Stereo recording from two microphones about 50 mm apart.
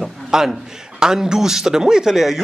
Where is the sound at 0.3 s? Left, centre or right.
Centre.